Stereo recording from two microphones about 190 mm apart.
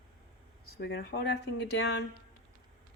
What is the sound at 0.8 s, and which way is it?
Speech, 65° left (ahead or behind).